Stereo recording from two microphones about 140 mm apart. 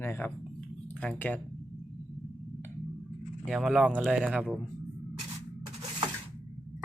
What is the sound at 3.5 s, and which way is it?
Speech, centre (ahead or behind).